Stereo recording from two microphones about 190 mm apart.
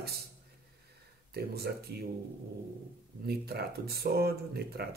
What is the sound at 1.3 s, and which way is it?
Speech, 55° right (ahead or behind).